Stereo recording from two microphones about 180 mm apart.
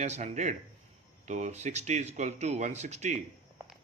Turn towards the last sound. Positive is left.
turn(degrees=-40)  # may be behind; listen again after turning